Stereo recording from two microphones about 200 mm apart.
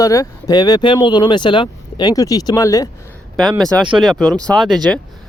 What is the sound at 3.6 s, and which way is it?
Speech, centre (ahead or behind).